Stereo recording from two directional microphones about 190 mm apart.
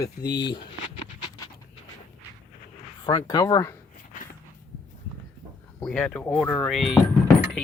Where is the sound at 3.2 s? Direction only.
20° left (ahead or behind).